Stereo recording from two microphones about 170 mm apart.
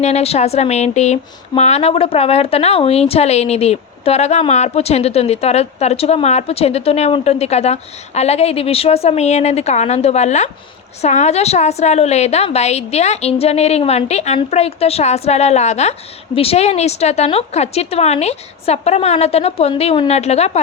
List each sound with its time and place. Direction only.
0.0 s speech: 40° left (ahead or behind)